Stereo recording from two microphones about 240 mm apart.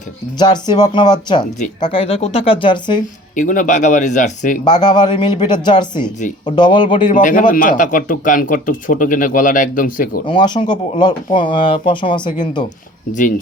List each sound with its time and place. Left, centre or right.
0.3 s speech: centre
3.3 s speech: left
4.6 s speech: centre
7.1 s speech: left
10.2 s speech: centre